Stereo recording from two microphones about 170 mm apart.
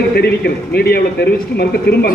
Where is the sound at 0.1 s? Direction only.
70° left (ahead or behind).